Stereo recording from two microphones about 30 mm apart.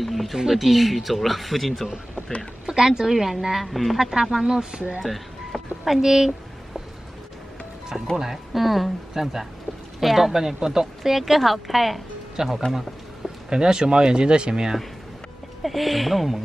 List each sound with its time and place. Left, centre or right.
0.0 s speech: centre
2.6 s speech: right
3.1 s speech: centre
3.6 s speech: centre
4.0 s speech: centre
5.0 s a sound: centre
8.2 s speech: centre
11.1 s speech: centre
12.4 s speech: right
15.6 s speech: centre